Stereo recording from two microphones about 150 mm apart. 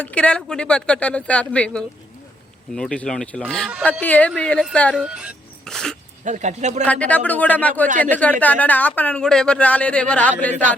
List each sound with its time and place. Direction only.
0.0 s speech: 10° left (ahead or behind)
4.9 s speech: 5° right (ahead or behind)
5.6 s dog: 5° left (ahead or behind)
6.2 s speech: 50° right (ahead or behind)
6.8 s speech: 10° left (ahead or behind)
7.9 s speech: 60° right (ahead or behind)
8.1 s speech: 10° left (ahead or behind)